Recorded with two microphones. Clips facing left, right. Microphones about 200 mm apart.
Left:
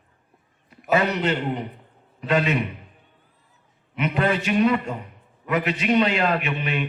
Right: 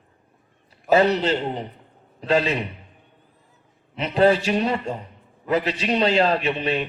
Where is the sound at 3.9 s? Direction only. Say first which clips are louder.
Right 5 dB; 30° right (ahead or behind).